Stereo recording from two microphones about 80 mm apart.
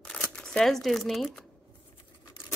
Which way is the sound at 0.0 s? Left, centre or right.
Centre.